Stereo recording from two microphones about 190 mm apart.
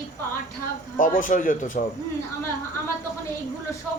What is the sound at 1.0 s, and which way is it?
Speech, 45° left (ahead or behind).